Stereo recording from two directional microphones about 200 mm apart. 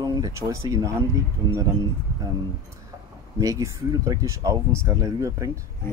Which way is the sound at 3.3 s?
15° right (ahead or behind).